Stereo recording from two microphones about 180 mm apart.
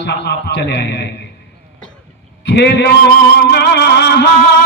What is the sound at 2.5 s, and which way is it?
A man's voice, 70° left (ahead or behind).